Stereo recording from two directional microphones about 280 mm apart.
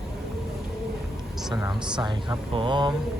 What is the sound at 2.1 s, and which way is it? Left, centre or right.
Speech, centre.